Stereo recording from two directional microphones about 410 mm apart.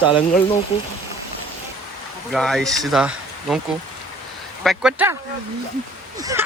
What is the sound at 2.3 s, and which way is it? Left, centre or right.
Speech, centre.